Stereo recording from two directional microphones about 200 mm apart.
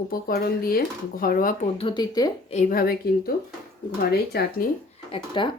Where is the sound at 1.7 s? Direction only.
25° left (ahead or behind).